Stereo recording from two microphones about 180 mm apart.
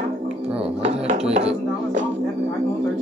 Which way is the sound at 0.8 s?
45° right (ahead or behind).